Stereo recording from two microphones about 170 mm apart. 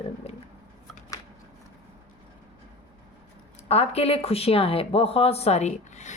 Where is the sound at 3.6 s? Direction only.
35° left (ahead or behind).